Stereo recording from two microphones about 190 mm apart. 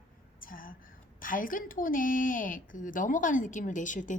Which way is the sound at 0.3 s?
50° left (ahead or behind).